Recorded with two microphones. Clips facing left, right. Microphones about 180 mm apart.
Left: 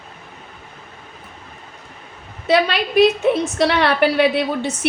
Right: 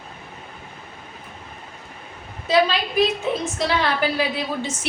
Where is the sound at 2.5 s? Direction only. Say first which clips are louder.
Left 2 dB; 70° left (ahead or behind).